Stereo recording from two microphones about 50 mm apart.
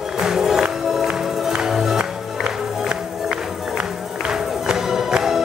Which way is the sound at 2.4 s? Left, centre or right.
Centre.